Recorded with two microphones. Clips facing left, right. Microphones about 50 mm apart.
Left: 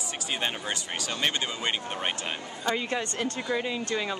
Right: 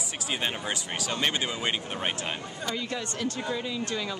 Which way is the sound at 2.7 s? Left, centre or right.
Left.